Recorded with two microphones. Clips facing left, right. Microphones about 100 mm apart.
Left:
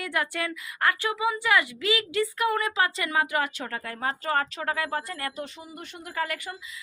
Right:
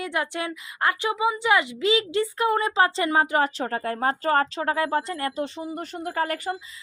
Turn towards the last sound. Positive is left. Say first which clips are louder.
# right 5 dB
turn(degrees=-40)  # may be behind; listen again after turning